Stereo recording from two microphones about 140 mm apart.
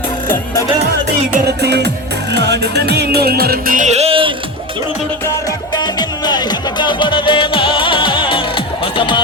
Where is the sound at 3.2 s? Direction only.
90° right; by 4.3 s 40° right (ahead or behind).